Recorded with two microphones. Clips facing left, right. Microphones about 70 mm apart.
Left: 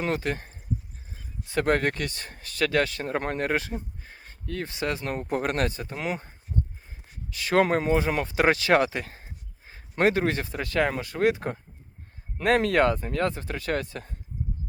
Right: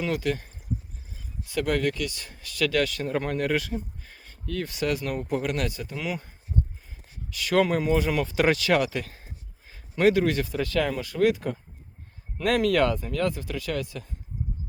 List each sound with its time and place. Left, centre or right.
0.0 s speech: left